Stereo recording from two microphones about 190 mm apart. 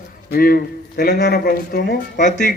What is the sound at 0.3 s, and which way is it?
A man's voice, 50° left (ahead or behind).